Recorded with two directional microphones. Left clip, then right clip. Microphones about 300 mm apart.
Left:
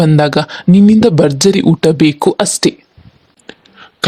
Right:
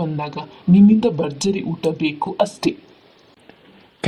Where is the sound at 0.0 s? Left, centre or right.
Left.